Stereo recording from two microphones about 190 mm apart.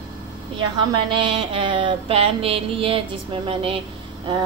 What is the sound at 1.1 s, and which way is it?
A woman's voice, 25° right (ahead or behind).